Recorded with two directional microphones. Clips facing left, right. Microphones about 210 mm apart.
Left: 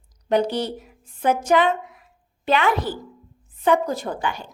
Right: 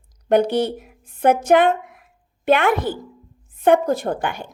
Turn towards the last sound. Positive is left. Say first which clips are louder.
# right 3 dB
turn(degrees=-55)  # may be behind; listen again after turning